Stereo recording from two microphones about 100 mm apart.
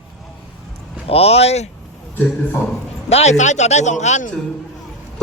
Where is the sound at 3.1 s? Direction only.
90° left.